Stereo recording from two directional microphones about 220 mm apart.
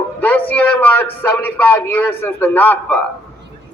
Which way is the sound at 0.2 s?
10° left (ahead or behind).